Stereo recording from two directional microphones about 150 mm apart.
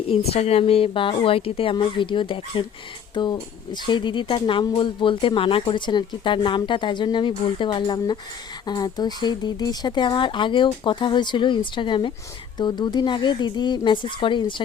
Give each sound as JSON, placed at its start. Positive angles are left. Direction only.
{"t": 0.1, "sound": "speech", "side_deg": 40}